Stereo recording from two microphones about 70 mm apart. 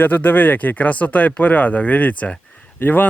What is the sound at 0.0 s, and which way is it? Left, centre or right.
Speech, left.